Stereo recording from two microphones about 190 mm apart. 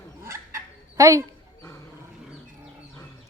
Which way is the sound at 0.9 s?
15° right (ahead or behind).